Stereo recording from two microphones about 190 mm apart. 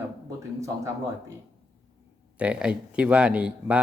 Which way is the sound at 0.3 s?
15° right (ahead or behind).